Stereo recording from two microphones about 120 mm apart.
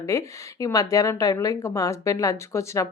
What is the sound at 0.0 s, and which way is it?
A woman's voice, 25° left (ahead or behind).